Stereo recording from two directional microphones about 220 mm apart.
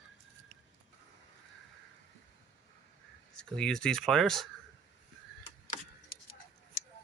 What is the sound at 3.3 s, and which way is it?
Speech, 5° left (ahead or behind).